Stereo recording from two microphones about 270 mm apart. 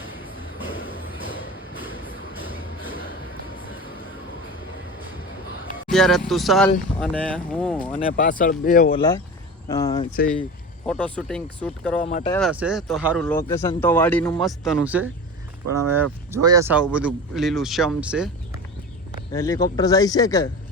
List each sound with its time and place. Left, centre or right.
5.9 s speech: centre
7.9 s speech: left
9.0 s speech: centre
11.9 s speech: left
12.3 s speech: centre
15.6 s speech: right
16.3 s speech: centre
19.3 s speech: centre